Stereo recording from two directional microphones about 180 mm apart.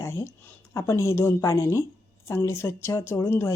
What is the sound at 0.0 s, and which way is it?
Speech, 15° left (ahead or behind).